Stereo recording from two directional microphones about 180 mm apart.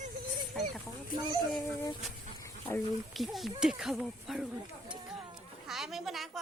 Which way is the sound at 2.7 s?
15° left (ahead or behind).